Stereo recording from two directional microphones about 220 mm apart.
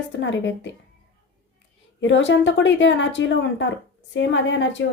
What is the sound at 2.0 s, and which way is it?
A woman's voice, 55° left (ahead or behind).